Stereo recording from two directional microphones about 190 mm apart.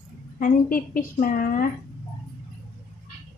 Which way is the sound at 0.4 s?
45° left (ahead or behind).